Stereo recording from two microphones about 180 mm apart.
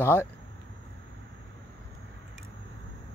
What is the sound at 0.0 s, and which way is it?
Speech, 15° left (ahead or behind).